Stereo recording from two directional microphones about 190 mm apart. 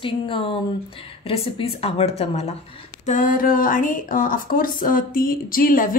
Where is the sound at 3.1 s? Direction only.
45° left (ahead or behind).